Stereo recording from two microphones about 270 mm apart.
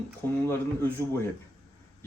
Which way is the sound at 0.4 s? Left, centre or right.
Centre.